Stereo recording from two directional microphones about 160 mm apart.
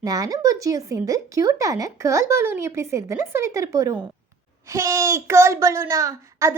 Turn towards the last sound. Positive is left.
turn(degrees=-20)  # may be behind; listen again after turning